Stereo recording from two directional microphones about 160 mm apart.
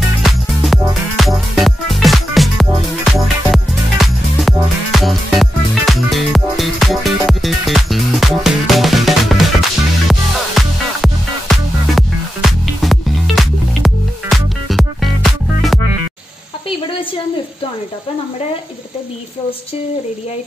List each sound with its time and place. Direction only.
0.2 s music: centre (ahead or behind)
10.6 s music: centre (ahead or behind)